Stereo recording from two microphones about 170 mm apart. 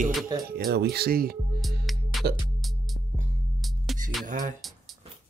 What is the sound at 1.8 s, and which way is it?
Music, centre (ahead or behind).